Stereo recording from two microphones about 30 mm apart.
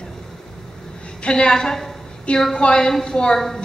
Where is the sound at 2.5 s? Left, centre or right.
Left.